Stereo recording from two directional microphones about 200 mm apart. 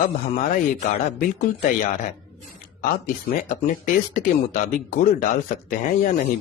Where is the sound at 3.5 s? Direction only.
40° left (ahead or behind).